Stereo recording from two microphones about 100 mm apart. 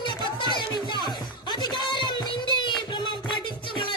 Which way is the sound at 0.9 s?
45° left (ahead or behind).